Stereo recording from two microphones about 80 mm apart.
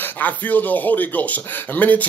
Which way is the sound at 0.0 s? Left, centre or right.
Centre.